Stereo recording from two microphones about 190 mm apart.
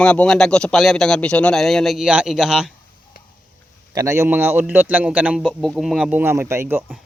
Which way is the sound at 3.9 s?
15° right (ahead or behind).